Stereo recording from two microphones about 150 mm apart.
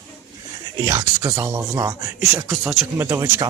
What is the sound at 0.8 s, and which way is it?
Speech, 25° right (ahead or behind).